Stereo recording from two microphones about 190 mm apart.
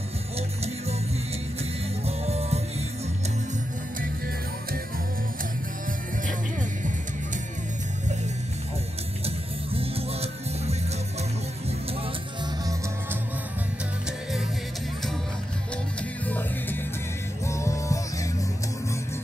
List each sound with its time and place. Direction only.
2.0 s music: 35° right (ahead or behind)
9.2 s music: 30° right (ahead or behind)
16.3 s music: 10° left (ahead or behind)